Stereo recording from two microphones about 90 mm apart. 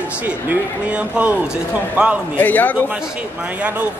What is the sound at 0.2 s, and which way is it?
Speech, 15° right (ahead or behind).